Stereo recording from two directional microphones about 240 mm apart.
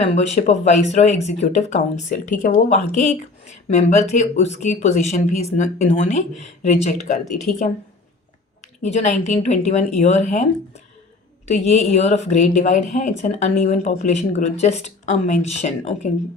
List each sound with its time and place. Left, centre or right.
0.0 s a woman's voice: left
8.8 s speech: left
11.4 s speech: left